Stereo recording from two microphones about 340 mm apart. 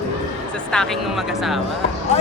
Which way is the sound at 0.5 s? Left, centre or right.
Centre.